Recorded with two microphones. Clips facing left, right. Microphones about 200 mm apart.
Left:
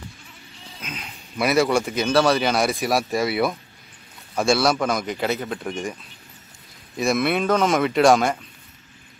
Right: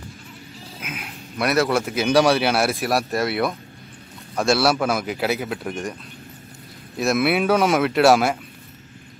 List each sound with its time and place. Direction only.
0.7 s speech: 5° right (ahead or behind)
7.0 s speech: 5° right (ahead or behind)